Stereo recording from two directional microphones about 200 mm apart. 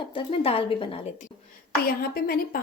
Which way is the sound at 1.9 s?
50° left (ahead or behind).